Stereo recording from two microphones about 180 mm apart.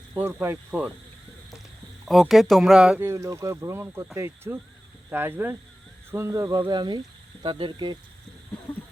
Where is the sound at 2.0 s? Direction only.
Centre (ahead or behind); by 7.9 s 25° right (ahead or behind).